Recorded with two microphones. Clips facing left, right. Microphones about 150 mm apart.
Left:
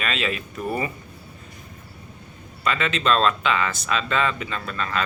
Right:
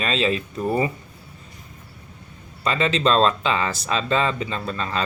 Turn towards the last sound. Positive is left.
turn(degrees=-30)  # may be behind; listen again after turning